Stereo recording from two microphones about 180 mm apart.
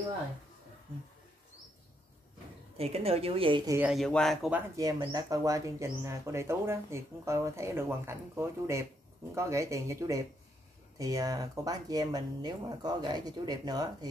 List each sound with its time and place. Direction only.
2.8 s a woman's voice: 35° right (ahead or behind)
3.7 s speech: 5° right (ahead or behind)
4.7 s speech: 20° right (ahead or behind)